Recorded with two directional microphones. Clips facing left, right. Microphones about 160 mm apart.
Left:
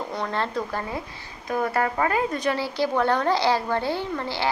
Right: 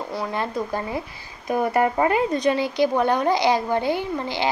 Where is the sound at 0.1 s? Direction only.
10° right (ahead or behind).